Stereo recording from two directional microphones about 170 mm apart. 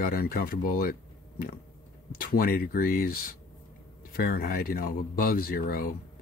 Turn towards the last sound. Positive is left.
turn(degrees=55)  # may be behind; listen again after turning